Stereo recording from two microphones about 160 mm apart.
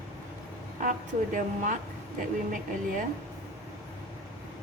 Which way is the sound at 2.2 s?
55° right (ahead or behind).